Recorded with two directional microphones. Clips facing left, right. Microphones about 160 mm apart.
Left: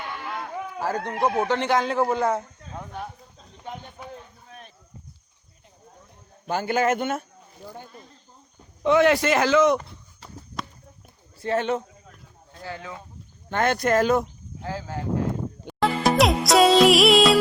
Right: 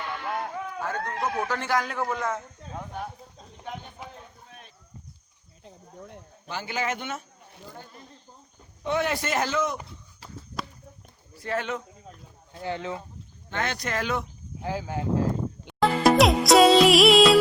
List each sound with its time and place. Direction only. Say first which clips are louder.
0.8 s speech: left 6 dB; 35° left (ahead or behind)
6.5 s speech: left 8 dB; 50° left (ahead or behind)
8.8 s speech: left 8 dB; 90° left
11.3 s speech: left 6 dB; 25° left (ahead or behind)
12.5 s speech: right 5 dB; 25° right (ahead or behind)
13.5 s speech: left 9 dB; 50° left (ahead or behind)
14.6 s speech: right 1 dB; 15° right (ahead or behind)
15.6 s music: right 2 dB; centre (ahead or behind)